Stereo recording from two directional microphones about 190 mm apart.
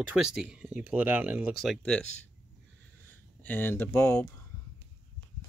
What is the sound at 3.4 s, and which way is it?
Speech, 10° left (ahead or behind).